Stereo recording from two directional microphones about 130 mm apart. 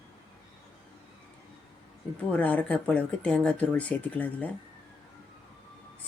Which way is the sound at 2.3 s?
10° left (ahead or behind).